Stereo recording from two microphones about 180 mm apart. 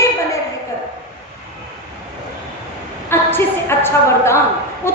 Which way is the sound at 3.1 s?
10° left (ahead or behind).